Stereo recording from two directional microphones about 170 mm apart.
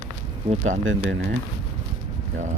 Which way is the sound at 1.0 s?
90° right.